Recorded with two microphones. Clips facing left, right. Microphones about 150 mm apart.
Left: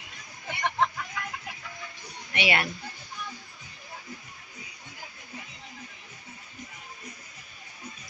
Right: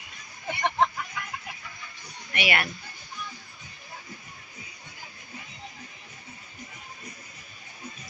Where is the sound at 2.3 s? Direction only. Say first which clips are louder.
Left 1 dB; 25° left (ahead or behind).